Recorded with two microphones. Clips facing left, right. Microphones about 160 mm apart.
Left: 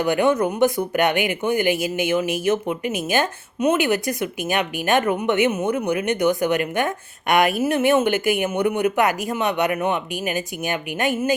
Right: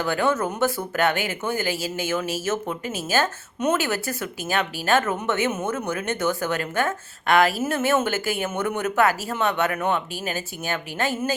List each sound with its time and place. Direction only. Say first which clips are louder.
0.0 s speech: left 4 dB; 15° left (ahead or behind)